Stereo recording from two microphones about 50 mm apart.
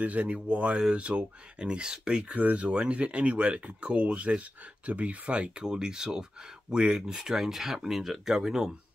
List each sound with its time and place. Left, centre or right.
0.0 s speech: right; by 8.7 s centre